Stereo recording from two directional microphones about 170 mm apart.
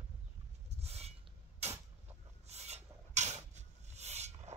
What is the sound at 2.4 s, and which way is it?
Rub, 40° right (ahead or behind).